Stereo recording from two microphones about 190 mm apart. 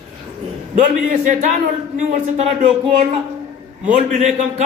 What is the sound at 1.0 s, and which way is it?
A man's voice, 40° right (ahead or behind).